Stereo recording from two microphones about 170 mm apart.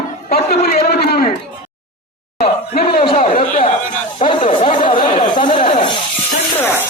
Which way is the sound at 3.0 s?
30° left (ahead or behind).